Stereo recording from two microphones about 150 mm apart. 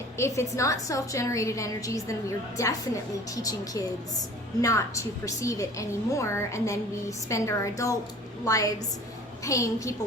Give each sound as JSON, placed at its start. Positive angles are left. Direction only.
{"t": 0.2, "sound": "a woman's voice", "side_deg": 20}